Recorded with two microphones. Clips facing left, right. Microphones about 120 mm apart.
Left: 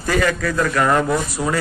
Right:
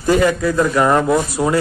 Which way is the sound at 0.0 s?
20° right (ahead or behind).